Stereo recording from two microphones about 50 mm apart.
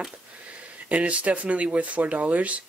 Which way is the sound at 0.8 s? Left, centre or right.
Right.